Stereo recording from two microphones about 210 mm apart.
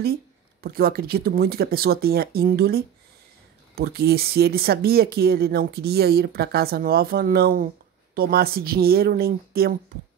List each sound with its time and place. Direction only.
0.0 s speech: 45° right (ahead or behind)